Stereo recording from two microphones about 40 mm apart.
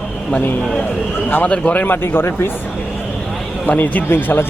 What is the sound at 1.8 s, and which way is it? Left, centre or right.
Speech, left.